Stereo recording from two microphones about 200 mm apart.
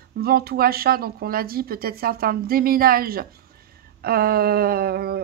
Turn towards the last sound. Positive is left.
turn(degrees=-50)  # may be behind; listen again after turning